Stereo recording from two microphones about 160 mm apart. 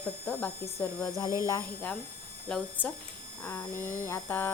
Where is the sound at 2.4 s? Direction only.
5° left (ahead or behind).